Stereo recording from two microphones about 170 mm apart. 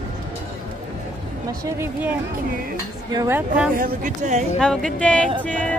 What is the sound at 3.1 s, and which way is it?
Speech, 25° right (ahead or behind).